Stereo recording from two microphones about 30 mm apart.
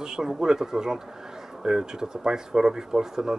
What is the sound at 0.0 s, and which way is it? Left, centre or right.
Speech, centre.